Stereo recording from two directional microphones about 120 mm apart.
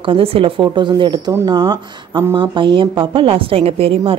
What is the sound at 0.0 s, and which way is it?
A woman's voice, 50° right (ahead or behind).